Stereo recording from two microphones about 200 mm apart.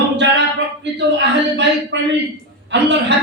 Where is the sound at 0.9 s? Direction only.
60° right (ahead or behind).